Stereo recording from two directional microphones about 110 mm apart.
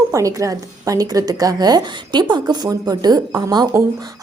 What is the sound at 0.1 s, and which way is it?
A woman's voice, 30° right (ahead or behind).